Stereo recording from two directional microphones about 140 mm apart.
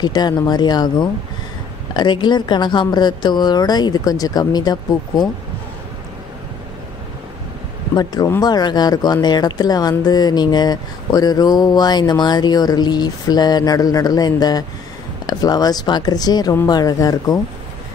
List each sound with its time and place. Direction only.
0.0 s speech: 30° left (ahead or behind)
7.9 s speech: 30° left (ahead or behind)